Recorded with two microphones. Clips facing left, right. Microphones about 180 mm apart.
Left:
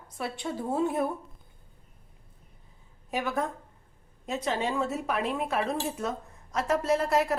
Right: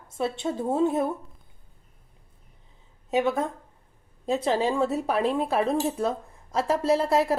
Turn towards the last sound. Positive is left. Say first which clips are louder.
# right 3 dB
turn(degrees=-30)  # may be behind; listen again after turning